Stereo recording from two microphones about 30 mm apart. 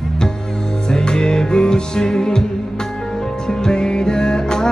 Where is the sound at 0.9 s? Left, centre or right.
Left.